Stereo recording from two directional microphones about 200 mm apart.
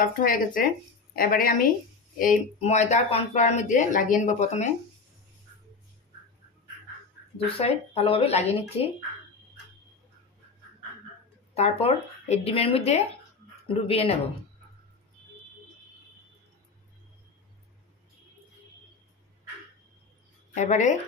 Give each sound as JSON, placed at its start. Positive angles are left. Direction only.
{"t": 0.0, "sound": "a woman's voice", "side_deg": 45}
{"t": 7.4, "sound": "speech", "side_deg": 30}
{"t": 11.5, "sound": "speech", "side_deg": 30}
{"t": 20.5, "sound": "speech", "side_deg": 35}